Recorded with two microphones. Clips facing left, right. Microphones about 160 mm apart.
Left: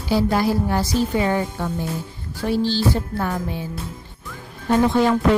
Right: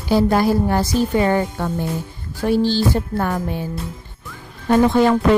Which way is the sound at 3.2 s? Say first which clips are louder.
Right 3 dB; 55° right (ahead or behind).